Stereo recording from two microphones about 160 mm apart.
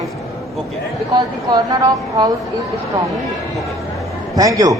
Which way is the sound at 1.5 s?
25° right (ahead or behind).